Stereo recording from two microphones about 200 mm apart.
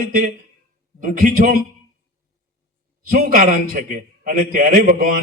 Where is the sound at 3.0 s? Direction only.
45° right (ahead or behind).